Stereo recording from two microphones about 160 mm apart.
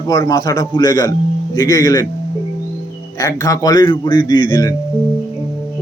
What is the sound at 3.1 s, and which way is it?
A man's voice, 20° left (ahead or behind).